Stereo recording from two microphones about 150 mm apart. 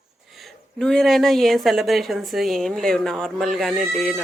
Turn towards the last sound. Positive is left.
turn(degrees=0)  # may be behind; listen again after turning